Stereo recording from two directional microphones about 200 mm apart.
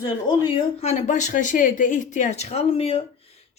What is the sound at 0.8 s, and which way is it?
Speech, 35° left (ahead or behind).